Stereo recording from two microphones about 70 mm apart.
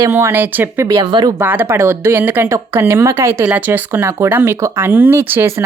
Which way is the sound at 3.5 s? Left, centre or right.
Right.